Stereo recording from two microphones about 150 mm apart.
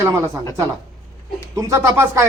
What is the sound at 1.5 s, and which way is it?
Speech, 20° right (ahead or behind).